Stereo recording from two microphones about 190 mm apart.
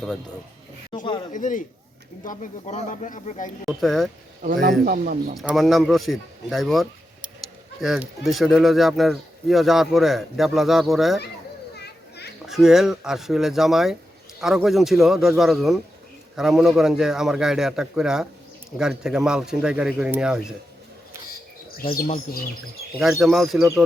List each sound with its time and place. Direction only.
0.9 s speech: 25° left (ahead or behind)
1.3 s a man's voice: 40° left (ahead or behind)
3.7 s speech: centre (ahead or behind)
4.9 s speech: 50° right (ahead or behind)
5.4 s speech: centre (ahead or behind)
11.8 s children playing: 60° left (ahead or behind)
12.5 s speech: centre (ahead or behind)
21.8 s a man's voice: 45° left (ahead or behind)
23.0 s speech: centre (ahead or behind)